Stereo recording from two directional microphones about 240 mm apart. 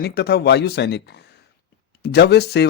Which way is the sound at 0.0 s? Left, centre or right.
Left.